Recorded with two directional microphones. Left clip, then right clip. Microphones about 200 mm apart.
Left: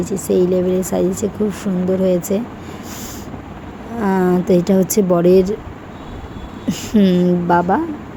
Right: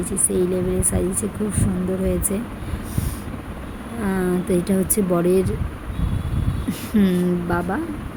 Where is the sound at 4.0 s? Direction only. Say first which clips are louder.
Left 7 dB; 20° left (ahead or behind).